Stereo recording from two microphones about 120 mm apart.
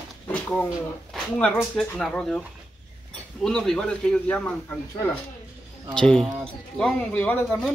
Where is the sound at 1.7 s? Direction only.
5° left (ahead or behind).